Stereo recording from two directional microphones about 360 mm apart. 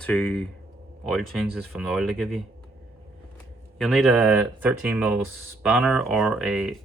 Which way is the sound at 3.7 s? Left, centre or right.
Centre.